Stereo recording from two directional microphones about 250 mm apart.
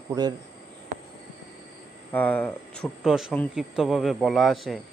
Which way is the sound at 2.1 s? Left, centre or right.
Centre.